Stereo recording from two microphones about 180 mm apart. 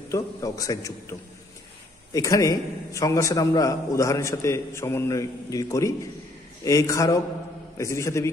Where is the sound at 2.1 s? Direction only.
20° left (ahead or behind).